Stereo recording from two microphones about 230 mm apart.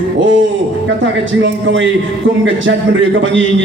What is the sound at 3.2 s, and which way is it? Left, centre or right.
Speech, right.